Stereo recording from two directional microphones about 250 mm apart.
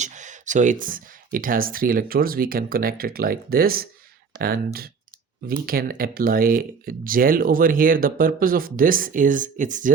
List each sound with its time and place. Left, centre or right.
0.0 s speech: right